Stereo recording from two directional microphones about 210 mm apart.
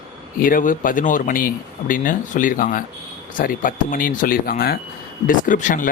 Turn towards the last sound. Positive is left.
turn(degrees=40)  # may be behind; listen again after turning